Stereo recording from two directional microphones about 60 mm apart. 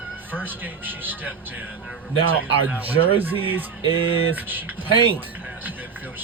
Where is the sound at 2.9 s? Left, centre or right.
Right.